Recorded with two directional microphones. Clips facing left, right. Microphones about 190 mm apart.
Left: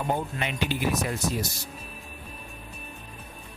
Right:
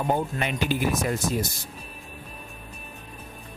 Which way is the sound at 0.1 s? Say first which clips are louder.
Right 4 dB; 45° right (ahead or behind).